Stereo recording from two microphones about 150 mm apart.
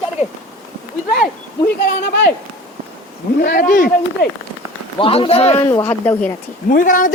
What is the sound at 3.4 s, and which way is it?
Speech, 70° left (ahead or behind).